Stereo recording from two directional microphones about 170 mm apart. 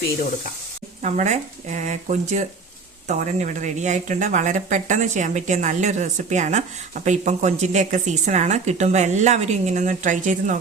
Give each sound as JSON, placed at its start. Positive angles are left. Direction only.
{"t": 1.0, "sound": "speech", "side_deg": -45}